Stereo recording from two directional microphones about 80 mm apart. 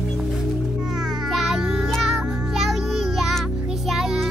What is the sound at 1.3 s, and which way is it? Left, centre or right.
Music, centre.